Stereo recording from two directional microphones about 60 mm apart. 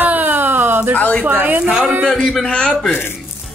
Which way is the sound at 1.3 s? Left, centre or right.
Right.